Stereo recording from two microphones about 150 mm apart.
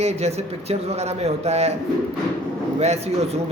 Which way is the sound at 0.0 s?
45° right (ahead or behind).